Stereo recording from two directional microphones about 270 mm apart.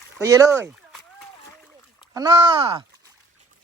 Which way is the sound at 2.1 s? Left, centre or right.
Centre.